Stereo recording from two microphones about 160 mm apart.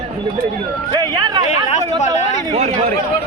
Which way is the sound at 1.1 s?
25° right (ahead or behind).